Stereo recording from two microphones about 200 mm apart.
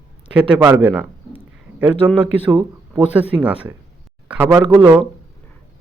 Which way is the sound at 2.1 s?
25° right (ahead or behind).